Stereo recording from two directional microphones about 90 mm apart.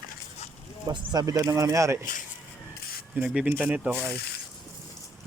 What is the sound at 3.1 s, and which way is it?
Speech, 15° right (ahead or behind).